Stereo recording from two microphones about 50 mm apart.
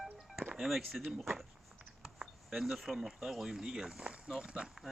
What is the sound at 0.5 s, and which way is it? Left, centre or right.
Speech, centre.